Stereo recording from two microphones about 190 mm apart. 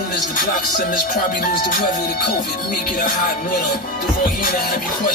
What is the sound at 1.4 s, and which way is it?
Music, 50° left (ahead or behind).